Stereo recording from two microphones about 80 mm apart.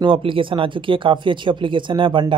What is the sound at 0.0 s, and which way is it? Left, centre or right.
Speech, right.